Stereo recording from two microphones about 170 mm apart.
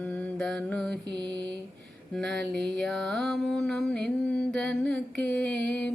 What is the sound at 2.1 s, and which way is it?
Mantra, 5° left (ahead or behind).